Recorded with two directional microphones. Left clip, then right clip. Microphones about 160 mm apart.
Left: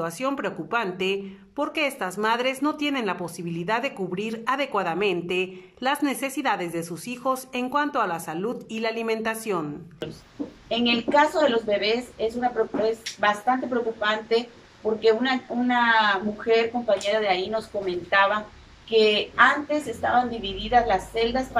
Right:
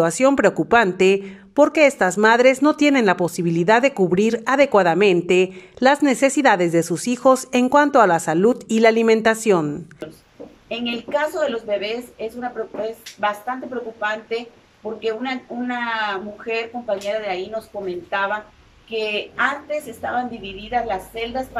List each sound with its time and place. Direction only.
0.0 s speech: 35° right (ahead or behind)
10.7 s speech: 5° right (ahead or behind)
20.7 s speech: 5° right (ahead or behind)